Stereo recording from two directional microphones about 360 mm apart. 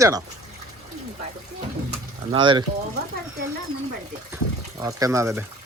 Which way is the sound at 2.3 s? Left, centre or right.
Centre.